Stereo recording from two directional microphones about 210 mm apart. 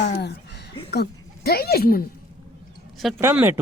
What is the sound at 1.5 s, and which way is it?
Speech, 45° left (ahead or behind).